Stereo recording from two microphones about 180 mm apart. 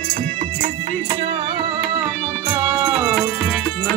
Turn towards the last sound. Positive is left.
turn(degrees=5)  # may be behind; listen again after turning